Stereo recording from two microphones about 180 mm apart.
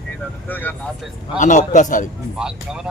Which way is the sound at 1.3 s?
45° left (ahead or behind).